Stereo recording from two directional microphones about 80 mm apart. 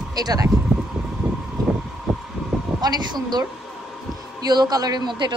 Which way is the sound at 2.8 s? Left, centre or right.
Right.